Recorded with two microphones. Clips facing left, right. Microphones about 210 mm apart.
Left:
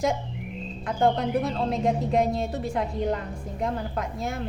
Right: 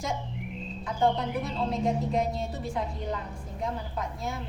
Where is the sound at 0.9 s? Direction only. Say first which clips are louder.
Left 3 dB; 70° left (ahead or behind).